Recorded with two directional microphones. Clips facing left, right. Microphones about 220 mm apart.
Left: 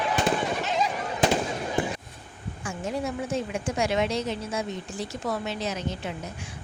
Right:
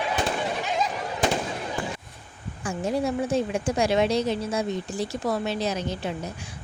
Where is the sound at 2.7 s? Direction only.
35° right (ahead or behind).